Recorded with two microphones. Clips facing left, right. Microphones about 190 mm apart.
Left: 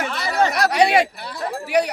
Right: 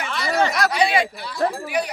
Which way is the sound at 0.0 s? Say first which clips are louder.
Left 1 dB; 40° left (ahead or behind).